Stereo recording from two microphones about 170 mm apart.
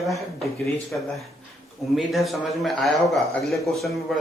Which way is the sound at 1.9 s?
Centre (ahead or behind).